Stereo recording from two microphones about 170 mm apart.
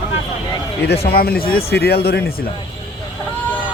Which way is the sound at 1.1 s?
60° left (ahead or behind).